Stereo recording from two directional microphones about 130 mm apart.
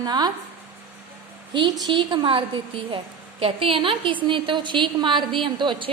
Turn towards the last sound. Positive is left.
turn(degrees=-40)  # may be behind; listen again after turning